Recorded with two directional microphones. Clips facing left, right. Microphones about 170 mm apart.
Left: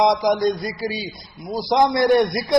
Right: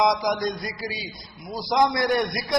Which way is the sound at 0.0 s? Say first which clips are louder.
Left 5 dB; 30° left (ahead or behind).